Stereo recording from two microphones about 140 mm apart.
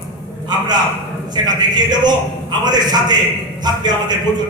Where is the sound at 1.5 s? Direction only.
30° right (ahead or behind).